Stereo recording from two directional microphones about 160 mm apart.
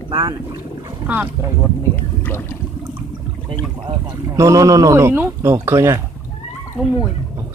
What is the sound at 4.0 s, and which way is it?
Speech, 20° right (ahead or behind).